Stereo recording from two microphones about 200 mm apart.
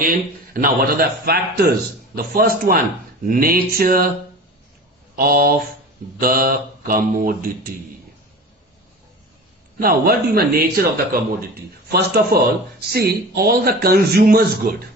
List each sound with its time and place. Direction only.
0.0 s a man's voice: 45° right (ahead or behind)
5.1 s a man's voice: 50° right (ahead or behind)
9.8 s a man's voice: 50° right (ahead or behind)